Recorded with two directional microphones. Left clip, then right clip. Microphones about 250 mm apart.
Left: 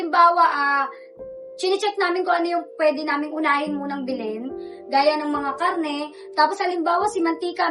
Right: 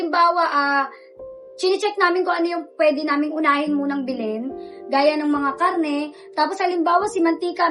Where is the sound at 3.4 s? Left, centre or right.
Centre.